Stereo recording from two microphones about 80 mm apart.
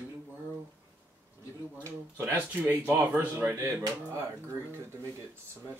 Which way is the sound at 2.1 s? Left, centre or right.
Right.